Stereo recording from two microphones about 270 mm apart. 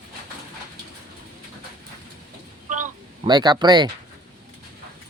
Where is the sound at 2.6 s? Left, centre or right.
Right.